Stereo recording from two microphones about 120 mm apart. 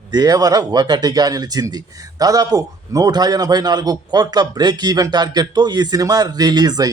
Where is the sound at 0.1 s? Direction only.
35° right (ahead or behind).